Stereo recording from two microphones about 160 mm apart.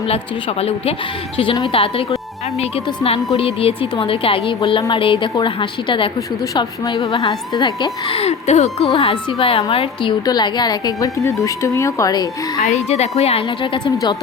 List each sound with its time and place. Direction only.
1.7 s a woman's voice: 35° left (ahead or behind)
12.6 s a woman's voice: 45° left (ahead or behind)